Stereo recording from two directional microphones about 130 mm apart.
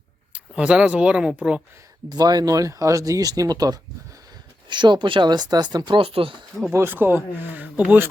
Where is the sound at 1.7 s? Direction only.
25° right (ahead or behind); by 6.5 s 40° right (ahead or behind).